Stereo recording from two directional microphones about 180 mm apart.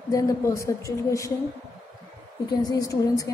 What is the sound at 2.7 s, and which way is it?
Speech, 20° left (ahead or behind).